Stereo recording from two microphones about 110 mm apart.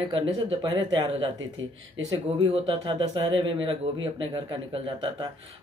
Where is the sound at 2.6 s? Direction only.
45° right (ahead or behind).